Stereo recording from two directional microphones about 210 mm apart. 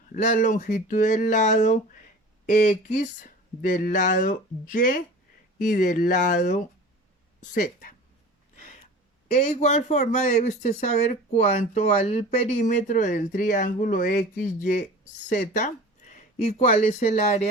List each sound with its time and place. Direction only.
0.1 s speech: 35° left (ahead or behind)
9.3 s speech: 35° left (ahead or behind)